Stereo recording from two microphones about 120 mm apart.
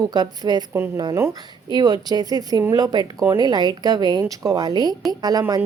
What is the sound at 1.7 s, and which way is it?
A woman's voice, 35° right (ahead or behind).